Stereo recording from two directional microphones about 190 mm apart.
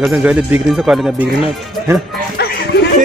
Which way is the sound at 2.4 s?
60° left (ahead or behind).